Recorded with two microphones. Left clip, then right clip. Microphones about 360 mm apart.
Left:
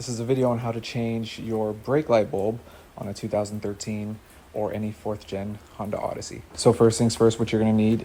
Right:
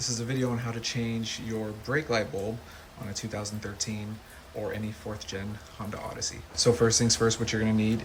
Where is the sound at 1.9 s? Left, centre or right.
Left.